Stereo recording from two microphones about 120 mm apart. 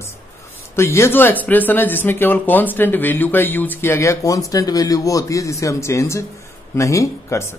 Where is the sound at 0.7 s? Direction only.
20° left (ahead or behind).